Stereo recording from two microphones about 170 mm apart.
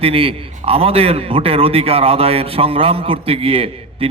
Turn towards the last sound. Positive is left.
turn(degrees=-35)  # may be behind; listen again after turning